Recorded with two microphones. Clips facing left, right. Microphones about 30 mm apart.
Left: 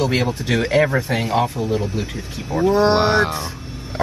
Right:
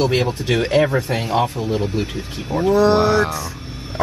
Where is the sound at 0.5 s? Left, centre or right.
Right.